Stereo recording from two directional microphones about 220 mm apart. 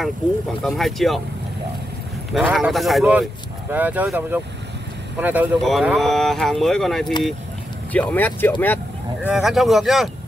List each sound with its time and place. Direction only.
0.7 s speech: centre (ahead or behind)
2.3 s speech: centre (ahead or behind)